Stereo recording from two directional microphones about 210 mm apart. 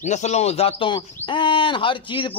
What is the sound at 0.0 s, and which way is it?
A man's voice, 35° left (ahead or behind).